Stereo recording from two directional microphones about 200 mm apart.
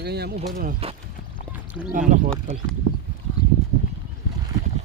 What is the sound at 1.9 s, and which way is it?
Speech, 40° right (ahead or behind).